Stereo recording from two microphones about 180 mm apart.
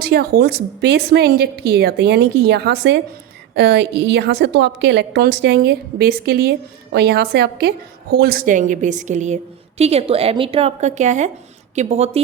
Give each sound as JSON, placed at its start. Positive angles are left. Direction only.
{"t": 0.0, "sound": "a woman's voice", "side_deg": -60}